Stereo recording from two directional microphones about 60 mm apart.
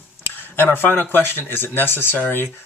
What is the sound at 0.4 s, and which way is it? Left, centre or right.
Speech, left.